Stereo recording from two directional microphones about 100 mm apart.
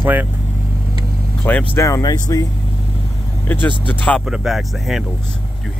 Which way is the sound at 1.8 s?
40° left (ahead or behind).